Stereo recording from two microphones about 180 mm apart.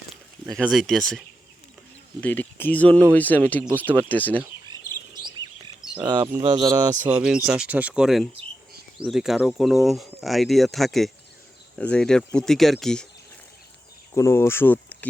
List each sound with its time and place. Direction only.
0.5 s speech: centre (ahead or behind)
2.2 s speech: 10° left (ahead or behind)
5.1 s bird: 25° right (ahead or behind)
6.1 s speech: 20° right (ahead or behind)
7.0 s speech: 5° right (ahead or behind)
14.1 s speech: 15° left (ahead or behind)